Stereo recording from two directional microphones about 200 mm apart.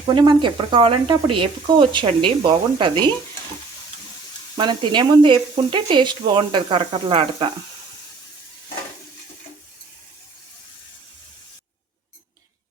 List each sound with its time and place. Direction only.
0.1 s speech: 25° right (ahead or behind)
4.5 s speech: 25° right (ahead or behind)